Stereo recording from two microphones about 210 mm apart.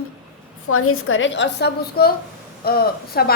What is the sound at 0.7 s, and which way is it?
A woman's voice, 90° left.